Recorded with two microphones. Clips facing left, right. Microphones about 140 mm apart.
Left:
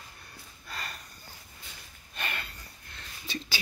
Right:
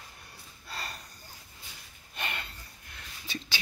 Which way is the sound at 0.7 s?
35° right (ahead or behind).